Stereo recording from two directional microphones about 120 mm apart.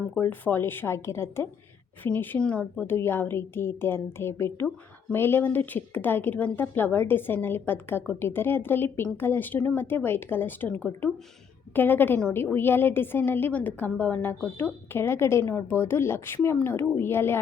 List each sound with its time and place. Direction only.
0.2 s a woman's voice: 15° left (ahead or behind)